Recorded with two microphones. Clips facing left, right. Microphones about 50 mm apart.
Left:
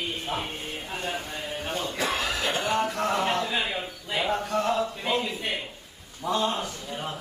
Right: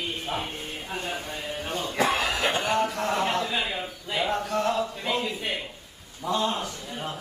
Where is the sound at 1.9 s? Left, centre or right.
Right.